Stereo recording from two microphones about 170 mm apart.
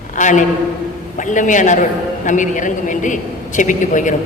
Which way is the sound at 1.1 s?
50° left (ahead or behind).